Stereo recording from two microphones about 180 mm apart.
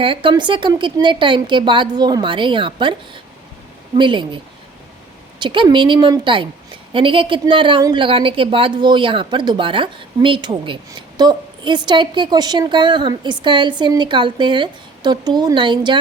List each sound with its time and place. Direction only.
0.0 s a woman's voice: 30° right (ahead or behind)
3.9 s a woman's voice: 25° right (ahead or behind)
5.4 s a woman's voice: 25° right (ahead or behind)